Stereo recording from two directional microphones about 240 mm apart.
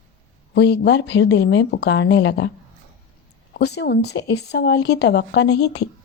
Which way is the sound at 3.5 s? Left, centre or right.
Left.